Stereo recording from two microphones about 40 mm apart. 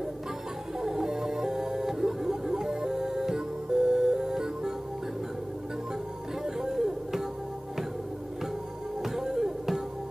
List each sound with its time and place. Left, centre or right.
0.7 s music: centre
6.4 s music: centre
9.0 s music: centre